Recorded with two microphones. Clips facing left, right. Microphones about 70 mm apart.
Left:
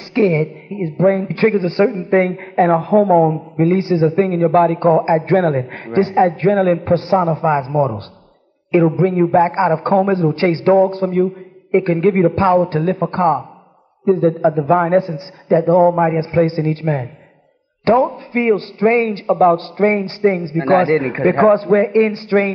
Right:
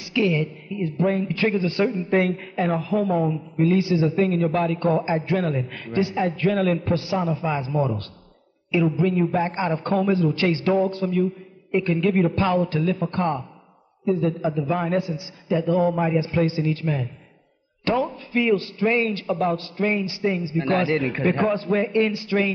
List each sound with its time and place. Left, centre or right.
0.1 s a woman's voice: left